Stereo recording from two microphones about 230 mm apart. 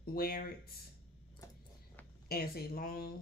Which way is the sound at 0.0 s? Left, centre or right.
Left.